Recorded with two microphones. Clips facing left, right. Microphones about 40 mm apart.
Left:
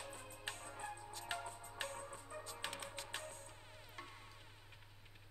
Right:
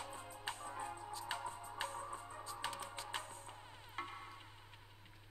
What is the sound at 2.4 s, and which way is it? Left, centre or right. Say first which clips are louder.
Music: right 4 dB; left.